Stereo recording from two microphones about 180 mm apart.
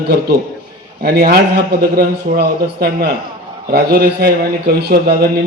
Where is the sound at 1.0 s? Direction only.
60° right (ahead or behind).